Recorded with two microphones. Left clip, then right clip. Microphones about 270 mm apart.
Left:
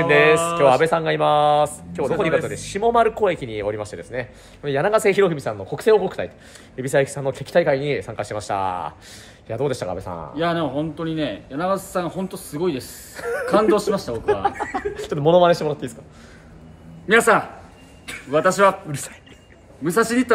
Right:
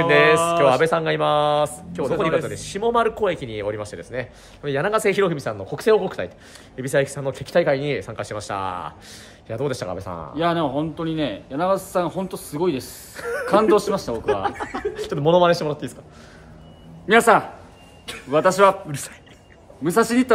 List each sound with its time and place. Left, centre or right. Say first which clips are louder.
0.0 s speech: even; centre
10.3 s speech: right 1 dB; centre
13.1 s speech: left 1 dB; centre
13.7 s speech: right 1 dB; centre
14.1 s speech: left 2 dB; centre
17.1 s speech: right 1 dB; centre
18.9 s speech: left 1 dB; centre
19.8 s speech: even; centre